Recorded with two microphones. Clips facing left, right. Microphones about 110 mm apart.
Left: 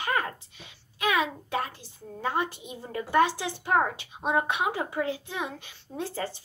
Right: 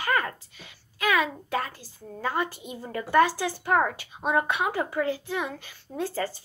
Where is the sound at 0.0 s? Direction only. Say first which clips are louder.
Right 2 dB; 20° left (ahead or behind).